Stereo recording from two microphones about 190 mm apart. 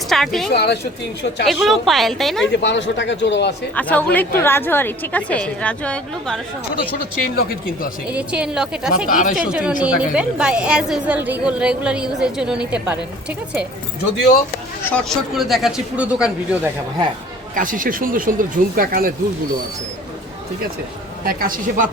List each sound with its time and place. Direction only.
0.1 s a woman's voice: centre (ahead or behind)
0.5 s speech: 60° left (ahead or behind)
1.5 s a woman's voice: centre (ahead or behind)
2.5 s speech: 70° left (ahead or behind)
3.8 s a woman's voice: 10° left (ahead or behind)
7.2 s speech: 50° left (ahead or behind)
8.1 s a woman's voice: 5° right (ahead or behind)
9.0 s speech: 45° left (ahead or behind)
9.3 s a woman's voice: 5° right (ahead or behind)
14.8 s a woman's voice: 5° left (ahead or behind)
17.5 s speech: 45° right (ahead or behind)
21.2 s speech: 50° right (ahead or behind)